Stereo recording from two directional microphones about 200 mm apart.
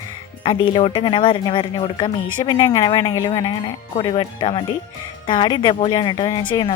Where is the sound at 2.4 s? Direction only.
20° left (ahead or behind).